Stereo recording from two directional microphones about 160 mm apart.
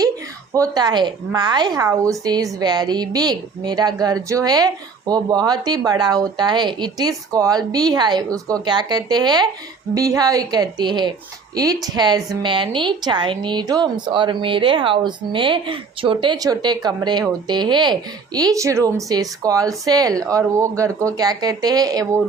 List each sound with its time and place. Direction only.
0.5 s a woman's voice: 20° right (ahead or behind)